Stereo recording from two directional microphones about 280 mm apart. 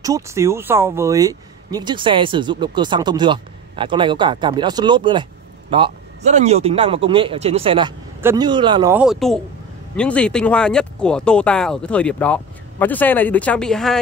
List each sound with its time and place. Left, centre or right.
0.0 s speech: centre